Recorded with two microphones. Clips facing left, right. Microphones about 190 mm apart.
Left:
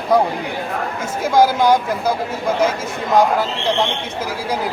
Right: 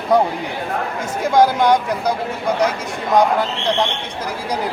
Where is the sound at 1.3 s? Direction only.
5° left (ahead or behind).